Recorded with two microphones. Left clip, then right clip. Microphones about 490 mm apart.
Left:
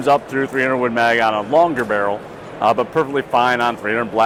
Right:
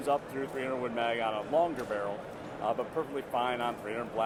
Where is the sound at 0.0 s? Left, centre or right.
Left.